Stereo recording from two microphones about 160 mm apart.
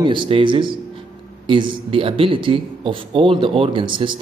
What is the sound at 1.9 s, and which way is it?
Speech, 35° right (ahead or behind).